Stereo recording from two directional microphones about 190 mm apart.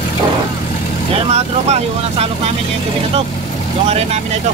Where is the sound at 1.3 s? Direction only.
35° right (ahead or behind).